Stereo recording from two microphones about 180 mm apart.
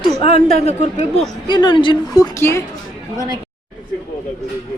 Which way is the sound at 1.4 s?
25° left (ahead or behind).